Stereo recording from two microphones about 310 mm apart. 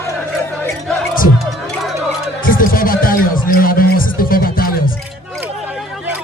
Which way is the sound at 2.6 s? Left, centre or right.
Left.